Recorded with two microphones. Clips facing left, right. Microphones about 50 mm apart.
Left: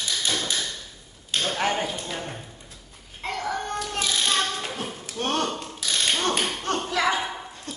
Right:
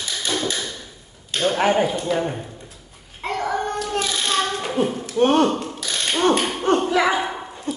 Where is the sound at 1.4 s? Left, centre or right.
Centre.